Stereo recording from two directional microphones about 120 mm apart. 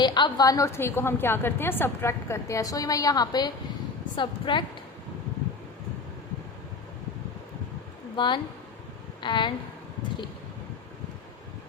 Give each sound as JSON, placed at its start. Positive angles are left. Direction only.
{"t": 0.0, "sound": "a woman's voice", "side_deg": 35}
{"t": 8.1, "sound": "a woman's voice", "side_deg": 40}